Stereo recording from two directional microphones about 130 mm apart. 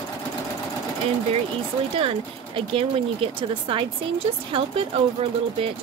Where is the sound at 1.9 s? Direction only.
45° right (ahead or behind).